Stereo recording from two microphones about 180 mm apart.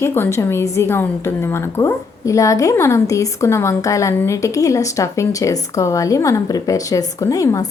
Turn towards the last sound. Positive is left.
turn(degrees=20)  # may be behind; listen again after turning